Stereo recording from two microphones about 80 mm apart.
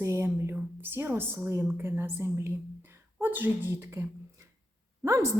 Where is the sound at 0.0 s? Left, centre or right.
Right.